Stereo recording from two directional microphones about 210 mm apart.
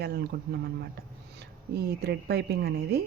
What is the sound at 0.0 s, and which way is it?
Speech, 50° right (ahead or behind).